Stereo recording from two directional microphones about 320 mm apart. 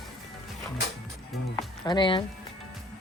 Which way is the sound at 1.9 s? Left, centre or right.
Centre.